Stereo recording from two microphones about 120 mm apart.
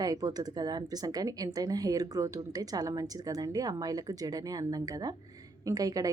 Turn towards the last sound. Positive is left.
turn(degrees=-30)  # may be behind; listen again after turning